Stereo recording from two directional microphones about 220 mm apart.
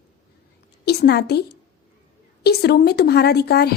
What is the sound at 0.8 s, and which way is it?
A woman's voice, 45° left (ahead or behind).